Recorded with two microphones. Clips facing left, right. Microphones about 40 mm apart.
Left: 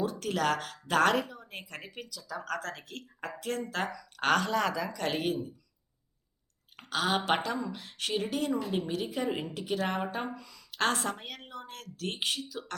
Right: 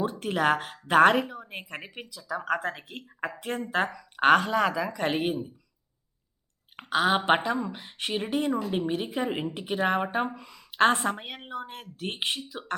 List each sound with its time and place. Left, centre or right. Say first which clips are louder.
0.0 s speech: right 4 dB; right
6.7 s a sound: right 6 dB; right
7.3 s speech: right 5 dB; right